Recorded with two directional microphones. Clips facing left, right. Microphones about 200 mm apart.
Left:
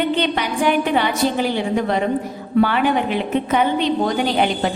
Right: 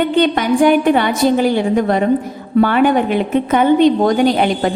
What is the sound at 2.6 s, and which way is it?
A woman's voice, 50° right (ahead or behind).